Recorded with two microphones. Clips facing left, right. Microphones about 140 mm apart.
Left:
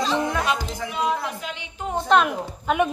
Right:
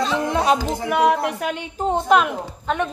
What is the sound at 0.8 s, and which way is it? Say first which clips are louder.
A woman's voice: right 7 dB; 65° right (ahead or behind).